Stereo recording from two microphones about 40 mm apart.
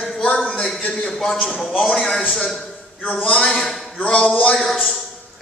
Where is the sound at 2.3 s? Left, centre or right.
Centre.